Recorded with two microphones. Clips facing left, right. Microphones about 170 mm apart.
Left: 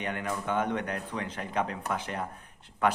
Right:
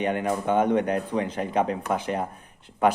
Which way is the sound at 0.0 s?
25° right (ahead or behind).